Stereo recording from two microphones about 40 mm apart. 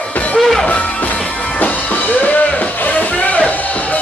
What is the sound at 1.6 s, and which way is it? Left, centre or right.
Music, left.